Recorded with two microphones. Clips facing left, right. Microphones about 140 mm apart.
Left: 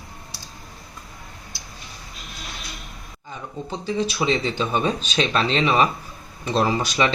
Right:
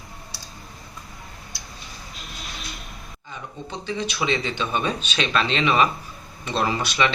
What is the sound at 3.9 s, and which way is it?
Speech, 40° left (ahead or behind).